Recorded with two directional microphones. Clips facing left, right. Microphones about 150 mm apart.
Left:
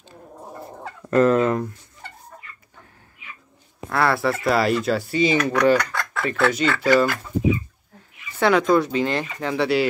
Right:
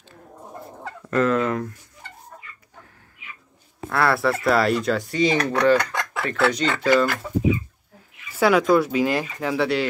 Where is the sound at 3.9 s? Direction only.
Centre (ahead or behind).